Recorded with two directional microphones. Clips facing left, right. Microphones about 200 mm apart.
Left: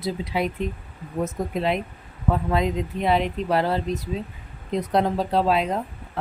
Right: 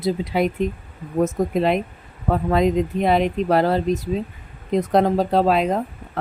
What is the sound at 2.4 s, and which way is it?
Speech, 45° right (ahead or behind).